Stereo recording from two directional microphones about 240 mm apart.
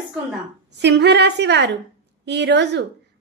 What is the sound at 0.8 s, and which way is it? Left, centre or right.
A woman's voice, right.